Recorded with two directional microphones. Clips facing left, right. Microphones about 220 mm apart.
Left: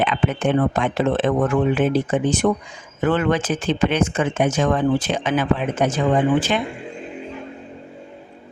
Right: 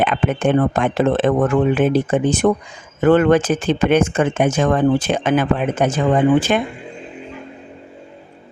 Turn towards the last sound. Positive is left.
turn(degrees=-50)  # may be behind; listen again after turning